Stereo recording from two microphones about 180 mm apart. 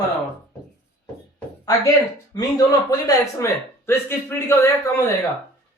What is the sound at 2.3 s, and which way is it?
Speech, 20° left (ahead or behind).